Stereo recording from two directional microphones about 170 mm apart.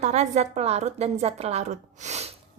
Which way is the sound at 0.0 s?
40° right (ahead or behind).